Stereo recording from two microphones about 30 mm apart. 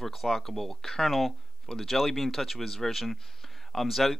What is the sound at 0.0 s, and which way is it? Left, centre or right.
Speech, centre.